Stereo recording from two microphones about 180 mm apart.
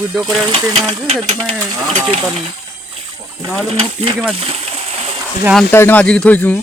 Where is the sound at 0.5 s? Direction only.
30° right (ahead or behind).